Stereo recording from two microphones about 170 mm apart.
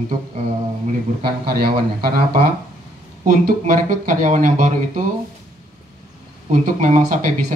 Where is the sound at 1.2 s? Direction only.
60° right (ahead or behind).